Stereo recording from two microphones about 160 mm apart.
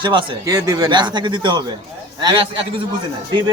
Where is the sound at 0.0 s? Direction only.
30° right (ahead or behind).